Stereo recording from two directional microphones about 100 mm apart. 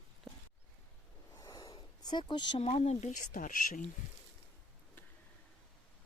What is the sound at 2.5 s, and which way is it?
Speech, 85° left.